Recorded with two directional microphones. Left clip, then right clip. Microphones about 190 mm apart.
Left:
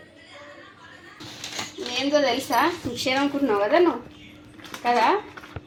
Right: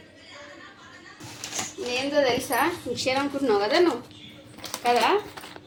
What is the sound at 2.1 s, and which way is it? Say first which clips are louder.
Speech: left 2 dB; 10° left (ahead or behind).